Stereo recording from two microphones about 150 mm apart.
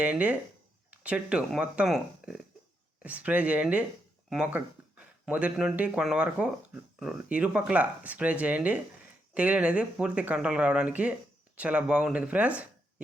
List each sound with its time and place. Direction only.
0.0 s speech: 10° right (ahead or behind)